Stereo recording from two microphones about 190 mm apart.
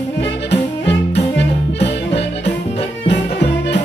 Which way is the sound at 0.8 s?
65° left (ahead or behind).